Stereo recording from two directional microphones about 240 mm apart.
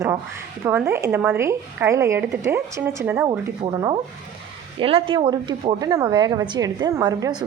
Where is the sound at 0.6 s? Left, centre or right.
Centre.